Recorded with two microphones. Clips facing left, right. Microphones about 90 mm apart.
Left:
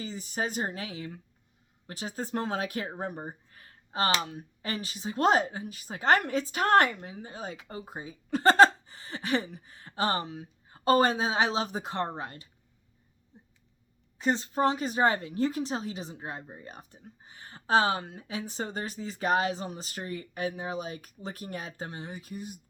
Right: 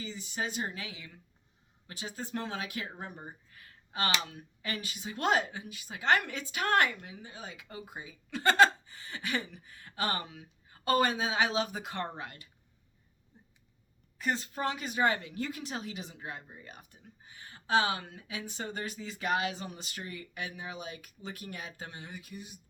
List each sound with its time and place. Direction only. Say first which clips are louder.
0.0 s speech: left 4 dB; 40° left (ahead or behind)
14.2 s speech: left 6 dB; 25° left (ahead or behind)